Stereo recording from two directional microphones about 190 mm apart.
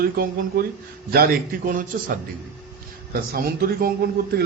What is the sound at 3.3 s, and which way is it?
Speech, 50° right (ahead or behind).